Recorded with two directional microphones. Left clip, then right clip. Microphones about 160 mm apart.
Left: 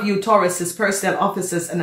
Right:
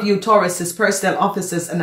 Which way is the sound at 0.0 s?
30° right (ahead or behind).